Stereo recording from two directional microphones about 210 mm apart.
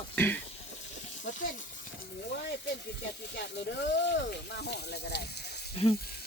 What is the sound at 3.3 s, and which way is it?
Speech, 55° left (ahead or behind).